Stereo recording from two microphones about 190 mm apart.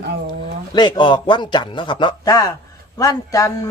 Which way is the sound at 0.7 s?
25° left (ahead or behind).